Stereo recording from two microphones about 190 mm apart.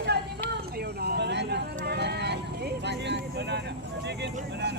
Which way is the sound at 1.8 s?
60° right (ahead or behind).